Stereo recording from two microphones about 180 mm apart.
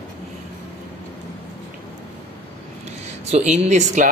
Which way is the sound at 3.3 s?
35° right (ahead or behind).